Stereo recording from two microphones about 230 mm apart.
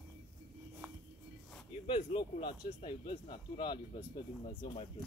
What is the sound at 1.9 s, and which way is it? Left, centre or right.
Speech, left.